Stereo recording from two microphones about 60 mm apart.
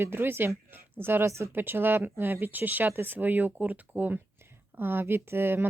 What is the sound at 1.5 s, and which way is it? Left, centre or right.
Speech, right.